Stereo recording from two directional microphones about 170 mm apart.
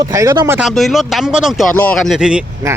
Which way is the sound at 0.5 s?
Centre (ahead or behind).